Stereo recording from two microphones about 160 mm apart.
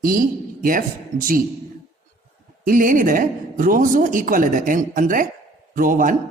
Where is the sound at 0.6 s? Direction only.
60° right (ahead or behind).